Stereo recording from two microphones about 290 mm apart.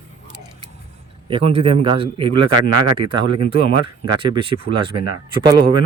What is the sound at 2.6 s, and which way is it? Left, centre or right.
Speech, right.